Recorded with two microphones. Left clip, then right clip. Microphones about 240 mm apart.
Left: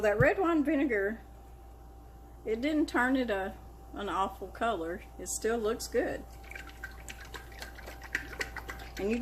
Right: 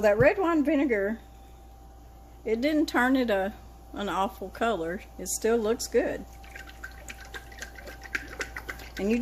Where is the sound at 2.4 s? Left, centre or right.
Right.